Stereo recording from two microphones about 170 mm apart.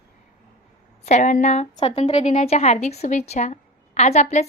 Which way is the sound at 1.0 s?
45° left (ahead or behind).